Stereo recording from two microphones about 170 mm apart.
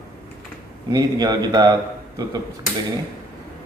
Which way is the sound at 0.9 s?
25° right (ahead or behind).